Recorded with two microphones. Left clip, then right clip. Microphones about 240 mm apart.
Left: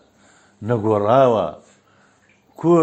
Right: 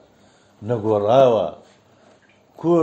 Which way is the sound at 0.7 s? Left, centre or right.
Left.